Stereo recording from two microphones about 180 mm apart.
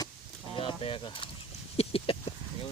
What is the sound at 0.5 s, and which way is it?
Mechanisms, 30° left (ahead or behind).